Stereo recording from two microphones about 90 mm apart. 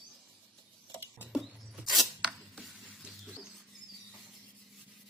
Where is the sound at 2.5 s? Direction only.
Centre (ahead or behind).